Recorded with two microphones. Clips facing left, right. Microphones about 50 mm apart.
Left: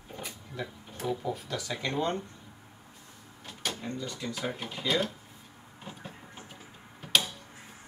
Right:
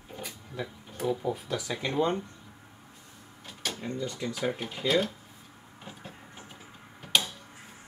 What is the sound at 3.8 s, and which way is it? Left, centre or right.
Speech, right.